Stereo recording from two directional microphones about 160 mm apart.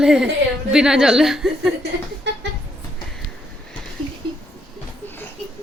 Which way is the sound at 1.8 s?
90° right.